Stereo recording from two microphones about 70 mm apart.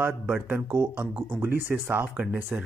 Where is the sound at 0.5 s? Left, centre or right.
Right.